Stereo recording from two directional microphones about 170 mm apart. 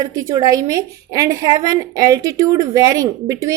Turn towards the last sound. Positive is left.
turn(degrees=-20)  # may be behind; listen again after turning